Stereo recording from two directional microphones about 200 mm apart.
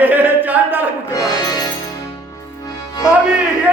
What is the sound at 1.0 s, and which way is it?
Music, 20° left (ahead or behind).